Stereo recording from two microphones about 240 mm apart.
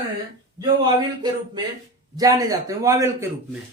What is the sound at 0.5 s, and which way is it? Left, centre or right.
Speech, centre.